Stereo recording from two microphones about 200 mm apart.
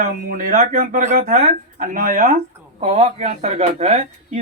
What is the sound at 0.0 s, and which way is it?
Speech, 40° right (ahead or behind).